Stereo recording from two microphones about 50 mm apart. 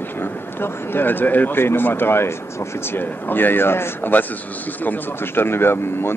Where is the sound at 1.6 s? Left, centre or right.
Left.